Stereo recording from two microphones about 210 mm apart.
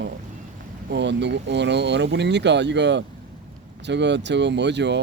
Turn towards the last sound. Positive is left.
turn(degrees=-55)  # may be behind; listen again after turning